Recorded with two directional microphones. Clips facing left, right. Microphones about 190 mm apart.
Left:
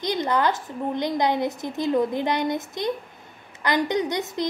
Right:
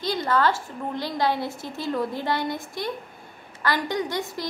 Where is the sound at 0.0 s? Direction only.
20° left (ahead or behind).